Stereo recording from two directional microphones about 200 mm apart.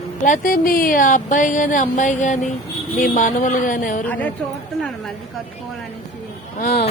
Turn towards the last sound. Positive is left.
turn(degrees=50)  # may be behind; listen again after turning